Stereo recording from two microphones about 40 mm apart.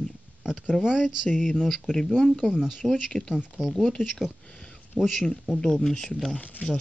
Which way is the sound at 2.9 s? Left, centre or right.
Centre.